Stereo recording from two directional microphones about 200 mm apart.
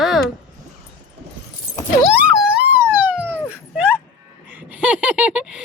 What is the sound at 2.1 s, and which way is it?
Police car, 5° right (ahead or behind).